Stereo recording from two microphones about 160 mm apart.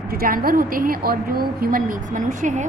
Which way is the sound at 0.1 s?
65° right (ahead or behind).